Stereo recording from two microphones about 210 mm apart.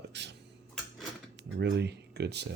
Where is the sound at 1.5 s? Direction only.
55° right (ahead or behind).